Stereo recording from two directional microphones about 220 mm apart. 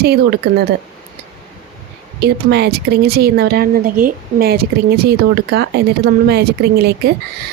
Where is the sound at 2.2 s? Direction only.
50° right (ahead or behind).